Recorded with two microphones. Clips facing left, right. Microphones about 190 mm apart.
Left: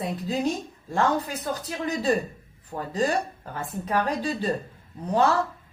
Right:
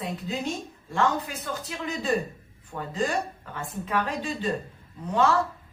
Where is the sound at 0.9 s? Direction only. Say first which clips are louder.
Left 2 dB; 35° left (ahead or behind).